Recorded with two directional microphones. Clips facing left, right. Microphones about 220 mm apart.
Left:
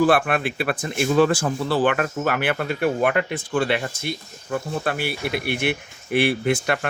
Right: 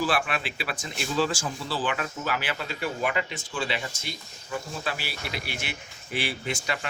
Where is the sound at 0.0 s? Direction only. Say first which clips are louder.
Left 9 dB; 55° left (ahead or behind).